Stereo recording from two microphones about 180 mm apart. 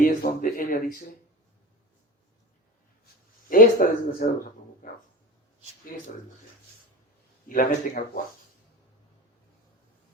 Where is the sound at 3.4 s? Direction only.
50° left (ahead or behind).